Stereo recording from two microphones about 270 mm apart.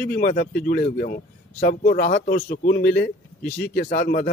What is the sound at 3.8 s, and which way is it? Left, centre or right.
Speech, left.